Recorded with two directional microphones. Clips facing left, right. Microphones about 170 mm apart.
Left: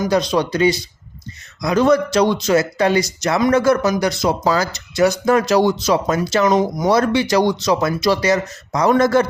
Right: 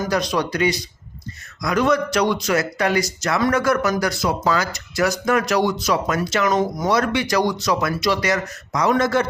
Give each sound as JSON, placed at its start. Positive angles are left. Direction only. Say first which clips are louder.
{"t": 0.0, "sound": "speech", "louder": "left 4 dB", "side_deg": 25}
{"t": 4.4, "sound": "speech", "louder": "left 3 dB", "side_deg": 35}
{"t": 6.8, "sound": "speech", "louder": "left 4 dB", "side_deg": 35}